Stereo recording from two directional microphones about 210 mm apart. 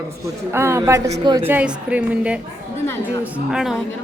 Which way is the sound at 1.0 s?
30° right (ahead or behind).